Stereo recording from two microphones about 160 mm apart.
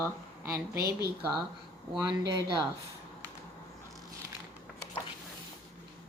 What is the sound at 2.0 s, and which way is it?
Speech, 25° right (ahead or behind).